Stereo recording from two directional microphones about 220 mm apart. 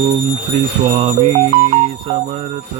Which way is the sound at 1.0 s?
25° right (ahead or behind).